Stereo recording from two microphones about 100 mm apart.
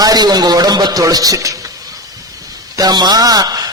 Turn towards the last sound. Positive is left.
turn(degrees=-40)  # may be behind; listen again after turning